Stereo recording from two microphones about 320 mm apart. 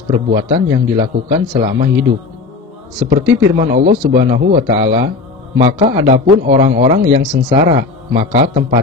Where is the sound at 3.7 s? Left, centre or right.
Right.